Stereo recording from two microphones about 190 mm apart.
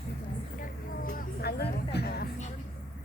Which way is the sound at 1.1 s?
55° left (ahead or behind).